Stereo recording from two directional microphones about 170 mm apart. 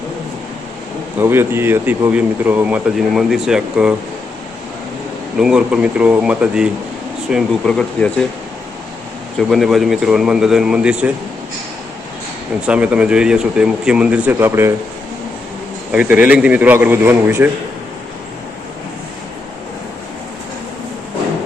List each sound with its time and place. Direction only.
1.2 s speech: 15° right (ahead or behind)
5.4 s speech: 5° right (ahead or behind)
9.5 s speech: centre (ahead or behind)
12.6 s speech: 5° right (ahead or behind)
15.9 s speech: 10° right (ahead or behind)